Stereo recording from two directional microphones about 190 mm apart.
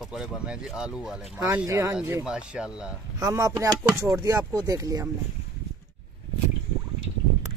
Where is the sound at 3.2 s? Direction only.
15° right (ahead or behind).